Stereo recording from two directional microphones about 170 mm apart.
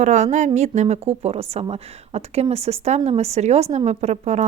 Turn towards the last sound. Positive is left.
turn(degrees=-40)  # may be behind; listen again after turning